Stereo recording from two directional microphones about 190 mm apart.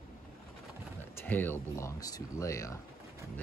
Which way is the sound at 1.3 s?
10° left (ahead or behind).